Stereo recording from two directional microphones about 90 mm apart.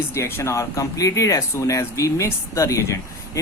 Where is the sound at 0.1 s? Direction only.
30° left (ahead or behind).